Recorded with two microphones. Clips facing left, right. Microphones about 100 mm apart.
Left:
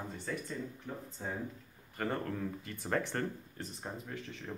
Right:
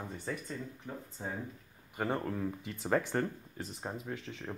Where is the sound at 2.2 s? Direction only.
10° right (ahead or behind).